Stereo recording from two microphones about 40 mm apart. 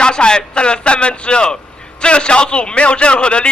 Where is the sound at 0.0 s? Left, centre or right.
Left.